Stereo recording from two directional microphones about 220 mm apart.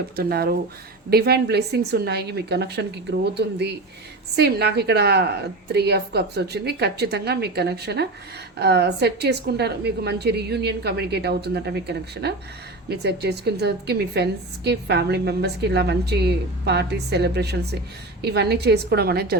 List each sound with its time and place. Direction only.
0.2 s a woman's voice: 45° right (ahead or behind)